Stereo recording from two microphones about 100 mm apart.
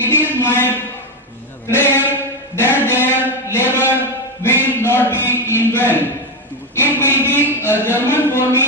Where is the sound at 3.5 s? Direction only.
20° left (ahead or behind).